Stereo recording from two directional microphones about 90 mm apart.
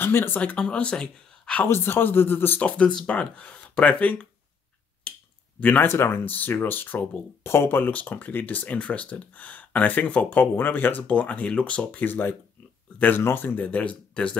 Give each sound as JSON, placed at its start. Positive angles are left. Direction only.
{"t": 0.0, "sound": "speech", "side_deg": 25}
{"t": 0.4, "sound": "speech", "side_deg": 10}
{"t": 1.6, "sound": "speech", "side_deg": 25}
{"t": 5.1, "sound": "finger snapping", "side_deg": 10}
{"t": 5.6, "sound": "speech", "side_deg": 15}